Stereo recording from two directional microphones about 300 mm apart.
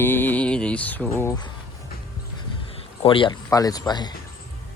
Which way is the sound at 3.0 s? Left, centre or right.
Centre.